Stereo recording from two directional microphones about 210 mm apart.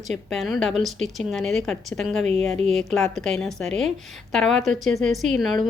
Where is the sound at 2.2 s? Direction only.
30° right (ahead or behind).